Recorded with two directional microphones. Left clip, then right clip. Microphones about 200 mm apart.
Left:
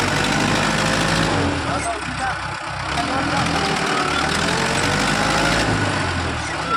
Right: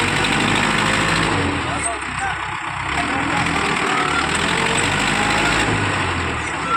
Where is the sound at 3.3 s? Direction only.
30° left (ahead or behind).